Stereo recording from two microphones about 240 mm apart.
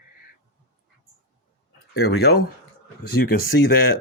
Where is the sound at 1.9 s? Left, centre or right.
Left.